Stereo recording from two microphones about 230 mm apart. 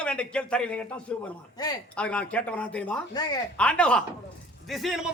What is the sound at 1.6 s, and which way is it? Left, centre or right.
Speech, centre.